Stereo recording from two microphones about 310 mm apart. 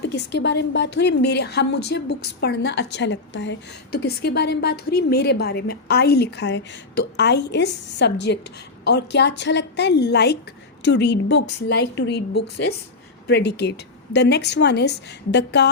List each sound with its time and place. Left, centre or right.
0.0 s a woman's voice: left
13.2 s a woman's voice: left